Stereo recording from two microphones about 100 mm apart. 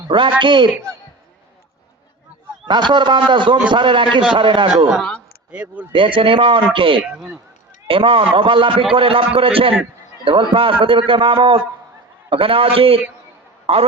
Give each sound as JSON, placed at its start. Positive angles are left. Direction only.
{"t": 0.1, "sound": "a man's voice", "side_deg": -55}
{"t": 2.6, "sound": "a man's voice", "side_deg": -50}
{"t": 5.5, "sound": "speech", "side_deg": -10}
{"t": 5.9, "sound": "a man's voice", "side_deg": -60}